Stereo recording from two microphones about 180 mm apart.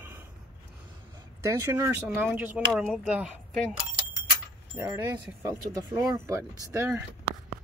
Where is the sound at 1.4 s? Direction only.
15° right (ahead or behind).